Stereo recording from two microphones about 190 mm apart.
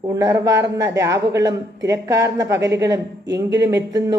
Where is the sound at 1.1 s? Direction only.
65° right (ahead or behind).